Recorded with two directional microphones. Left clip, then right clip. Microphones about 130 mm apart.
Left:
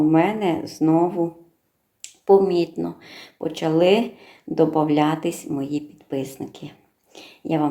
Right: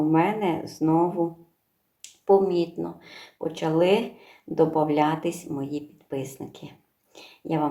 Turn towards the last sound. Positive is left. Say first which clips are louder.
# left 4 dB
turn(degrees=30)  # may be behind; listen again after turning